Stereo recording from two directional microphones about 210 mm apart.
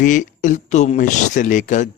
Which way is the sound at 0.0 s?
35° left (ahead or behind).